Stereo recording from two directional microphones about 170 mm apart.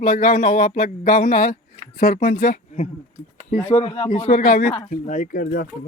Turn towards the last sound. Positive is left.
turn(degrees=55)  # may be behind; listen again after turning